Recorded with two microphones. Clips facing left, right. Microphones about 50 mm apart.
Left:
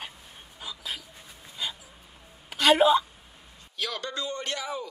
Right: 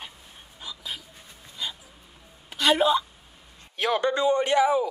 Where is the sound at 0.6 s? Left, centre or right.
Centre.